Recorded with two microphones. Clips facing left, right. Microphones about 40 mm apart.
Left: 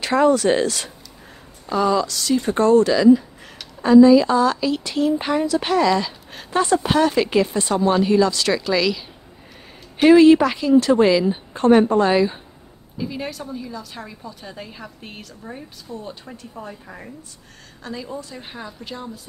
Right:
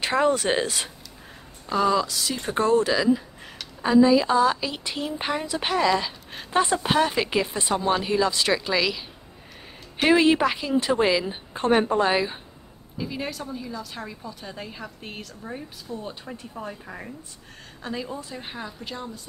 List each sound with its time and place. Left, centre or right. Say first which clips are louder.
0.3 s speech: left 6 dB; centre
1.7 s a woman's voice: left 3 dB; centre
17.8 s a woman's voice: even; right
18.1 s a woman's voice: left 2 dB; centre